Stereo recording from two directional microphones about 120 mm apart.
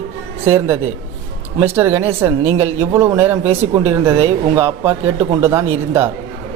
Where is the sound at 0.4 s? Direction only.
20° right (ahead or behind).